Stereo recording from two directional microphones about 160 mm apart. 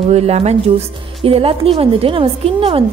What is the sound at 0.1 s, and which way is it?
A woman's voice, 40° right (ahead or behind).